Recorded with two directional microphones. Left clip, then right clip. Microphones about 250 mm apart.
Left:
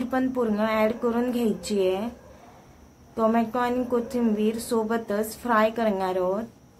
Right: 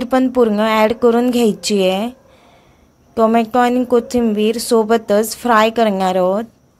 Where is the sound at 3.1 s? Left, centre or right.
Right.